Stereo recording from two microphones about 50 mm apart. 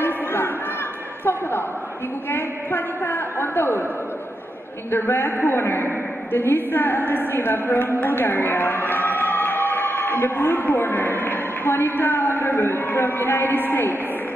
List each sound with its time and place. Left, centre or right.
0.0 s chatter: left
2.3 s a woman's voice: left
4.9 s a woman's voice: left